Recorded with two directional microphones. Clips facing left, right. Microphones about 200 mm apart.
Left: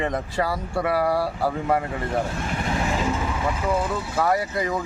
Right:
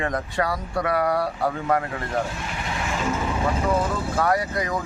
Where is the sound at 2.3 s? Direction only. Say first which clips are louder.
Left 4 dB; 45° left (ahead or behind).